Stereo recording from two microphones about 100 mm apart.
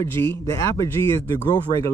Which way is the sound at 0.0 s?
25° left (ahead or behind).